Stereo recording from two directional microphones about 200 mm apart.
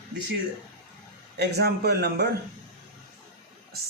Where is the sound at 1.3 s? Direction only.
55° right (ahead or behind).